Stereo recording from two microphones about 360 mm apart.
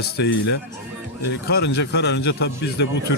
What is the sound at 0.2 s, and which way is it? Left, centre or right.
A man's voice, left.